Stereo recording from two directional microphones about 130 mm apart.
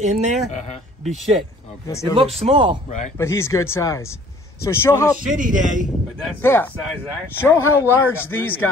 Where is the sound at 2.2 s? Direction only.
50° right (ahead or behind).